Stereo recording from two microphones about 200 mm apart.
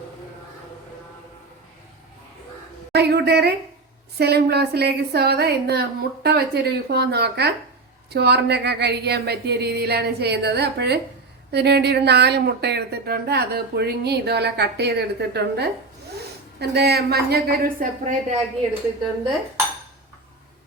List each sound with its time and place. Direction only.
2.9 s a woman's voice: 55° right (ahead or behind); by 18.4 s 35° right (ahead or behind)